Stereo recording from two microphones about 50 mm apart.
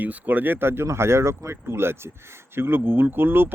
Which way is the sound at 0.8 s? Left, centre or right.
Right.